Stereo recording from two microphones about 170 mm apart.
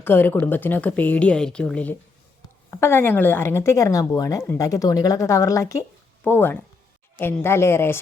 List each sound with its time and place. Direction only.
0.0 s a woman's voice: 10° left (ahead or behind)